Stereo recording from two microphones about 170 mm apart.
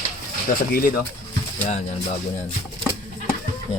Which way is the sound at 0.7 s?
55° left (ahead or behind).